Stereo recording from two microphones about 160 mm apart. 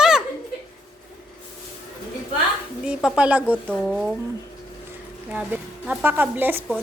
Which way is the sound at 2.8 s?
5° right (ahead or behind).